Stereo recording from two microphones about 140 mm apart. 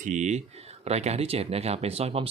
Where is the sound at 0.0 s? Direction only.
60° right (ahead or behind).